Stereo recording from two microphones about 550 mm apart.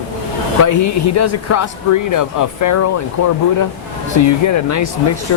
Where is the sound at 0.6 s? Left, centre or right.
Left.